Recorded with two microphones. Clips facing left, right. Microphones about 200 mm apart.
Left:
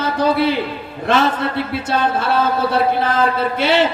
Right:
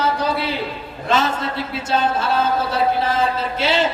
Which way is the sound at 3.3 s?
55° left (ahead or behind).